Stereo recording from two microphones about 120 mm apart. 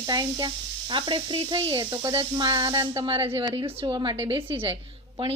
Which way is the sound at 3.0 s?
50° right (ahead or behind).